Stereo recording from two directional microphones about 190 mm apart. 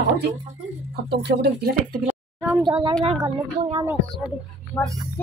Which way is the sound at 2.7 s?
25° right (ahead or behind).